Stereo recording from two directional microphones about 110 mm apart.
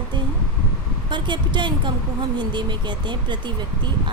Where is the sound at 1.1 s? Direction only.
45° right (ahead or behind).